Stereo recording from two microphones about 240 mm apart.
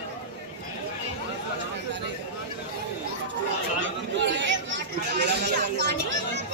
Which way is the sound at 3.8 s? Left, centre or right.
Right.